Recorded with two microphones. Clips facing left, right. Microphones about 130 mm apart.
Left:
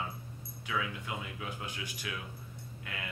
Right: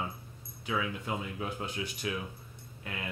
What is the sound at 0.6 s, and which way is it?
Speech, 25° right (ahead or behind).